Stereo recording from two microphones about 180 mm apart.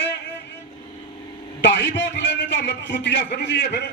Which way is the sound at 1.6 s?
75° left (ahead or behind).